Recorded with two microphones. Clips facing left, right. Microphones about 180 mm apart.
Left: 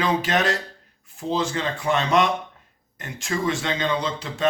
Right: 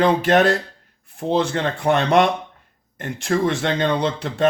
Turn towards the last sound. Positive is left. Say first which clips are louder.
# right 4 dB
turn(degrees=-60)  # may be behind; listen again after turning